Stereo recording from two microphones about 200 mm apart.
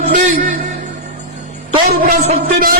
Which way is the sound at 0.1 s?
35° right (ahead or behind).